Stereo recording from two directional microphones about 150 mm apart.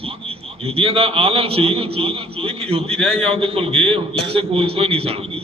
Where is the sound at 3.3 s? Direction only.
35° right (ahead or behind).